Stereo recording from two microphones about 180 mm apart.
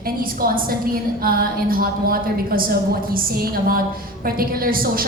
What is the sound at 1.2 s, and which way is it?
A woman's voice, 55° right (ahead or behind).